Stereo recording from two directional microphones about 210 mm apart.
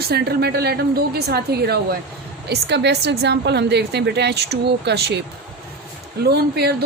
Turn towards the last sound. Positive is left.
turn(degrees=-50)  # may be behind; listen again after turning